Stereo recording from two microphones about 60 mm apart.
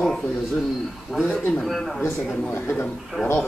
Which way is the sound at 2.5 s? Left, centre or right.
Left.